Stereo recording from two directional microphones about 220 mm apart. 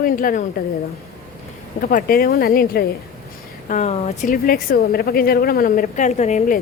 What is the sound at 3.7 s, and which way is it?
Speech, 30° left (ahead or behind).